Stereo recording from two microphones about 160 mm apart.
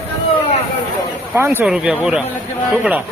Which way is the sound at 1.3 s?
15° right (ahead or behind).